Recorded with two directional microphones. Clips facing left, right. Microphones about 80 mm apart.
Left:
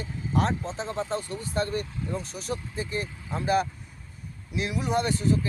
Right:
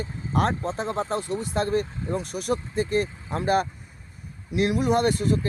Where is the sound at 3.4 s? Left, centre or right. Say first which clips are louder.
Right 2 dB; right.